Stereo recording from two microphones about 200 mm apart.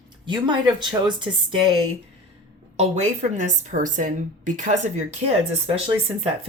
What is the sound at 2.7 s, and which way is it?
A woman's voice, 30° right (ahead or behind).